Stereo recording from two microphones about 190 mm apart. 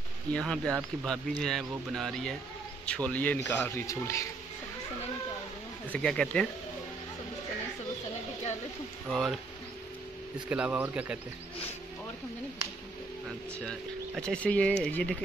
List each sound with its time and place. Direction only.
0.3 s a man's voice: 5° left (ahead or behind)
5.9 s speech: 5° left (ahead or behind)
9.1 s speech: centre (ahead or behind)
10.5 s speech: 5° right (ahead or behind)
13.6 s speech: 5° left (ahead or behind)